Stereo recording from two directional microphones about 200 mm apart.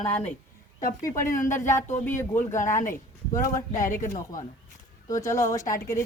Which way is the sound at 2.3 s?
40° left (ahead or behind).